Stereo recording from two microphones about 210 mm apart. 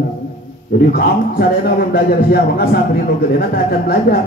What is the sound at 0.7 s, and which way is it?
A man's voice, 45° left (ahead or behind).